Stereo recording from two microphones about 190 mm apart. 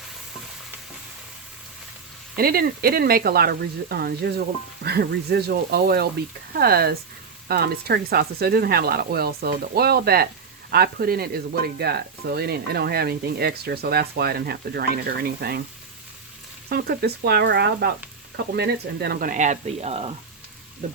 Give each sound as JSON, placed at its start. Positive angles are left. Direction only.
{"t": 2.3, "sound": "speech", "side_deg": -50}
{"t": 16.6, "sound": "speech", "side_deg": -55}